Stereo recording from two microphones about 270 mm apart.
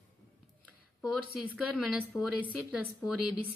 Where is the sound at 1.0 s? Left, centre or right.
Centre.